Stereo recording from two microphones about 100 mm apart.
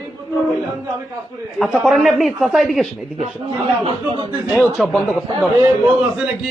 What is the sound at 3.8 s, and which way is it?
Speech, 65° right (ahead or behind).